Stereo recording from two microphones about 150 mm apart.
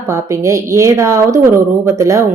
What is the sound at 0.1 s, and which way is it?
A woman's voice, 20° right (ahead or behind).